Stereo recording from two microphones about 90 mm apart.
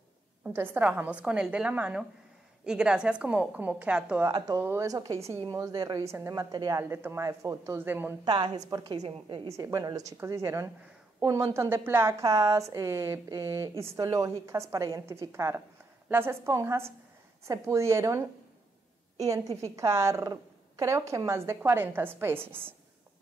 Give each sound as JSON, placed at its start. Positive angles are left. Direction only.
{"t": 0.5, "sound": "a woman's voice", "side_deg": -25}
{"t": 4.6, "sound": "a woman's voice", "side_deg": -30}
{"t": 6.8, "sound": "a woman's voice", "side_deg": -25}
{"t": 7.7, "sound": "a woman's voice", "side_deg": -25}
{"t": 8.3, "sound": "a woman's voice", "side_deg": -65}
{"t": 8.7, "sound": "a woman's voice", "side_deg": -50}